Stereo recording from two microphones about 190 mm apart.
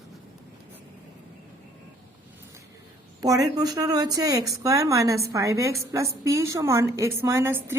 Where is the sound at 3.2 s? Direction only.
20° right (ahead or behind).